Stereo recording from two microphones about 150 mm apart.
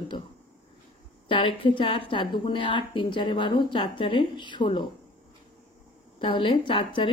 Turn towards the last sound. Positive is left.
turn(degrees=35)  # may be behind; listen again after turning